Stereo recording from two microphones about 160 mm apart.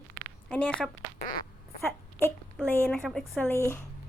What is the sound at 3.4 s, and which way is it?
Speech, 15° left (ahead or behind).